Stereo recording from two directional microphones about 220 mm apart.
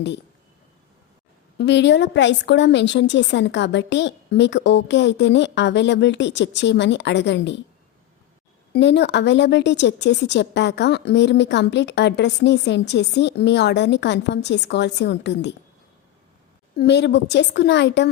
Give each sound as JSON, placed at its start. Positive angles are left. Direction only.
{"t": 1.5, "sound": "speech", "side_deg": 50}
{"t": 8.7, "sound": "speech", "side_deg": 50}
{"t": 16.7, "sound": "speech", "side_deg": 50}